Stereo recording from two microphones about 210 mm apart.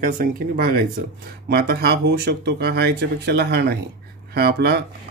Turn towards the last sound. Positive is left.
turn(degrees=-50)  # may be behind; listen again after turning